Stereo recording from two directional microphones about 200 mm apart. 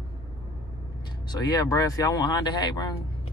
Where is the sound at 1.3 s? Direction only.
20° left (ahead or behind).